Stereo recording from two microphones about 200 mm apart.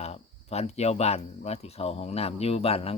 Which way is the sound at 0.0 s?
30° left (ahead or behind).